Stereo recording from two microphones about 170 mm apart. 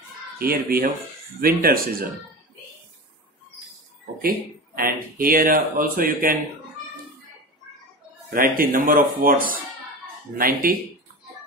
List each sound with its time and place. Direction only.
0.4 s speech: 60° right (ahead or behind)
4.2 s speech: 60° right (ahead or behind)
8.3 s speech: 55° right (ahead or behind)